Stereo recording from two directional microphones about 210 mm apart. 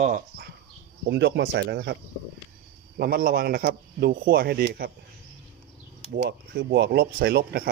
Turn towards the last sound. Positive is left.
turn(degrees=-50)  # may be behind; listen again after turning